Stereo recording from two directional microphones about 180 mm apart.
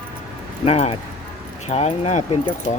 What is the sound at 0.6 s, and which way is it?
Speech, 35° left (ahead or behind).